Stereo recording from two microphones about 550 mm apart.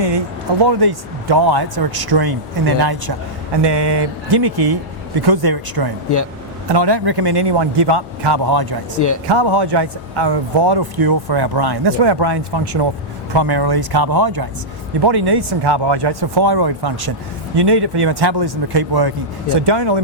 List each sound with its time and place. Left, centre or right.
0.6 s a man's voice: right